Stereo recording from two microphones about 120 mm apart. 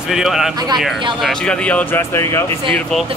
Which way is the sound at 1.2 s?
10° left (ahead or behind).